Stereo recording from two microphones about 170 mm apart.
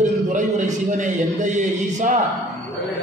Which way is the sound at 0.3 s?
45° right (ahead or behind).